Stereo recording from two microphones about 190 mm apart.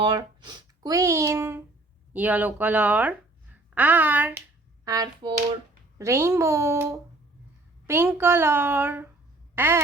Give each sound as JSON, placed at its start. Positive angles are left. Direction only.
{"t": 0.0, "sound": "speech", "side_deg": -25}
{"t": 4.9, "sound": "hands", "side_deg": -20}
{"t": 6.0, "sound": "speech", "side_deg": -15}